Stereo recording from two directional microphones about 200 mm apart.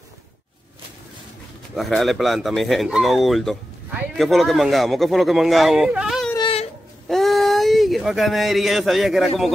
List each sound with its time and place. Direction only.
1.8 s speech: centre (ahead or behind)
6.3 s baby cry: 25° left (ahead or behind)
7.1 s a sound: centre (ahead or behind)